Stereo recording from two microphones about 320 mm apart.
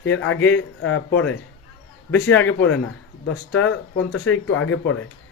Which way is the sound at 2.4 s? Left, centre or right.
Left.